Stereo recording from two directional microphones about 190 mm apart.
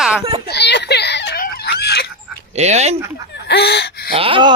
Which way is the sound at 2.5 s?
35° right (ahead or behind).